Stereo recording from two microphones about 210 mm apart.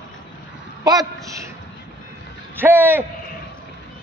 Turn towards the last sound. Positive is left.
turn(degrees=-10)  # may be behind; listen again after turning